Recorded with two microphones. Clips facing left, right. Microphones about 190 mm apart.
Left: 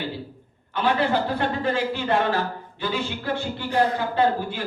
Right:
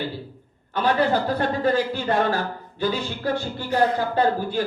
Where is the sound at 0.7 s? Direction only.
40° right (ahead or behind).